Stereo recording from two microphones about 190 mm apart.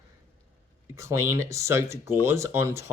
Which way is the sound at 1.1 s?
15° right (ahead or behind).